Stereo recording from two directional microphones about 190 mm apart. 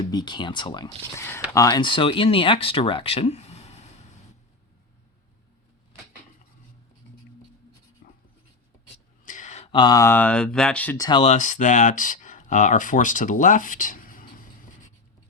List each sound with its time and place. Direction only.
0.0 s speech: 20° left (ahead or behind)
8.0 s writing: 45° left (ahead or behind)
9.2 s a sound: 40° left (ahead or behind)
9.7 s speech: 20° left (ahead or behind)
11.0 s speech: 25° left (ahead or behind); by 14.8 s 45° left (ahead or behind)